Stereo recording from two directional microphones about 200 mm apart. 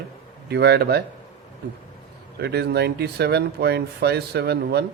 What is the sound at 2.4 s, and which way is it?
Speech, 55° right (ahead or behind).